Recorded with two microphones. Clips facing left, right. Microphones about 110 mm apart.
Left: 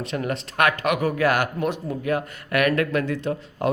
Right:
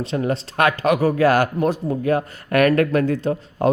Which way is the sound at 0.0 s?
30° right (ahead or behind).